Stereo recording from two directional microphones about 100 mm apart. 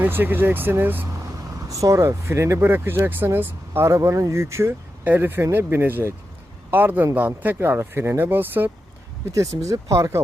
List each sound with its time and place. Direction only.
0.0 s speech: 20° right (ahead or behind)
1.6 s speech: 35° right (ahead or behind)
9.3 s speech: 35° right (ahead or behind)